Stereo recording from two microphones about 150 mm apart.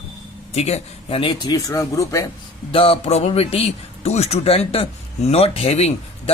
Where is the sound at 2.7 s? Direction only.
40° left (ahead or behind).